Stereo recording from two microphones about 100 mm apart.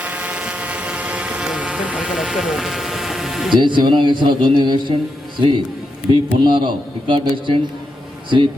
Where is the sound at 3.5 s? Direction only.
55° right (ahead or behind).